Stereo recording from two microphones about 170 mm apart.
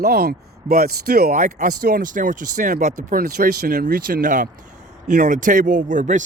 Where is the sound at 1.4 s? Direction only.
45° right (ahead or behind).